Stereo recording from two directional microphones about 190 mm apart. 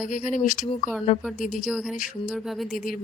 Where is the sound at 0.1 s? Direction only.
40° left (ahead or behind).